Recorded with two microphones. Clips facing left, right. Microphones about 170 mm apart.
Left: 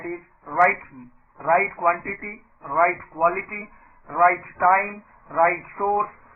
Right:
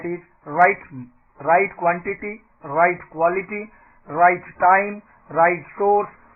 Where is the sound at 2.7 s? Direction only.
50° right (ahead or behind).